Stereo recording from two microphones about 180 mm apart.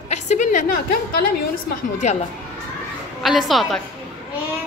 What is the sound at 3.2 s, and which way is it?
Speech, centre (ahead or behind).